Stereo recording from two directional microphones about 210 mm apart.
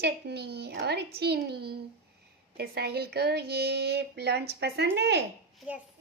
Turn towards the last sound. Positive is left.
turn(degrees=-5)  # may be behind; listen again after turning